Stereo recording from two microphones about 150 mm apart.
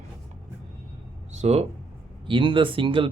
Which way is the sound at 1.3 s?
45° right (ahead or behind).